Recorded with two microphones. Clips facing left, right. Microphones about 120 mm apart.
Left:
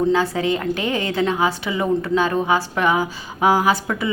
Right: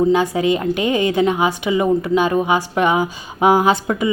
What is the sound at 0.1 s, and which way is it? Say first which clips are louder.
A woman's voice: right 3 dB; 15° right (ahead or behind).